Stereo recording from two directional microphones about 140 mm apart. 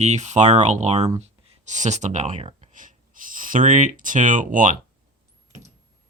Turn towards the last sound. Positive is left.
turn(degrees=-70)  # may be behind; listen again after turning